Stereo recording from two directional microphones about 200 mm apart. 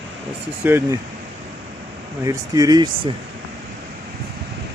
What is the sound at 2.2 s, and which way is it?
Speech, 15° right (ahead or behind).